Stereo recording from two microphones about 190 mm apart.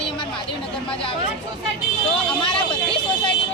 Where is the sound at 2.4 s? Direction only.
25° left (ahead or behind).